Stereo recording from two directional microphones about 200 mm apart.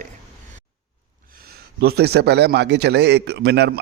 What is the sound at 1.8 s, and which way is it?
A man's voice, 55° right (ahead or behind).